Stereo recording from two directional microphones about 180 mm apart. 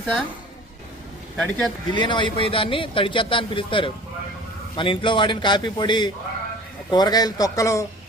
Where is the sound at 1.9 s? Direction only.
25° left (ahead or behind).